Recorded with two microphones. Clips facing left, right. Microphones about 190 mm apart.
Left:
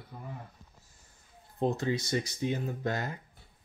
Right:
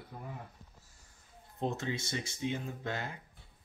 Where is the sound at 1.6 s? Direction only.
35° left (ahead or behind).